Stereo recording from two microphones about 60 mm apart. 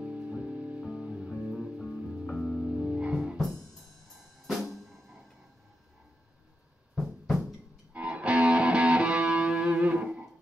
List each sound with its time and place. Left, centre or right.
0.0 s music: centre
3.3 s music: centre
4.5 s drum kit: centre
7.0 s music: centre
7.9 s music: centre